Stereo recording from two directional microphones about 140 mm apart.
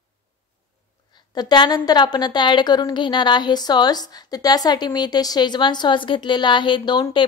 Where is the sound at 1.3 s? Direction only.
30° left (ahead or behind).